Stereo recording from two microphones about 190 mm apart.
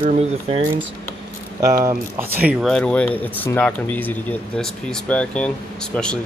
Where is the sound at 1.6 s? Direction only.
15° right (ahead or behind).